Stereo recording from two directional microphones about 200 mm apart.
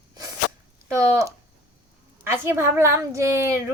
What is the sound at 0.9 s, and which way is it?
A woman's voice, 15° right (ahead or behind).